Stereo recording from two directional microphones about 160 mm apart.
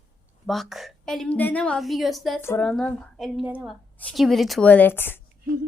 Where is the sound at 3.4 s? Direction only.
10° right (ahead or behind).